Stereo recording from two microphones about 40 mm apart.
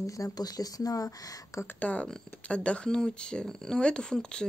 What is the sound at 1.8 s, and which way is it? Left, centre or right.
Speech, left.